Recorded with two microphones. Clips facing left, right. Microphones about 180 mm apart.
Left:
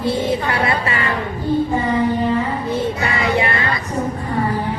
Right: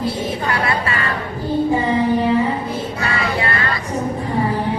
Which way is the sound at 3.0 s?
20° left (ahead or behind).